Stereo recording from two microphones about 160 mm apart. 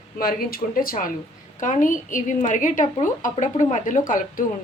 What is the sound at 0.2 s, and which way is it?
A woman's voice, 65° left (ahead or behind).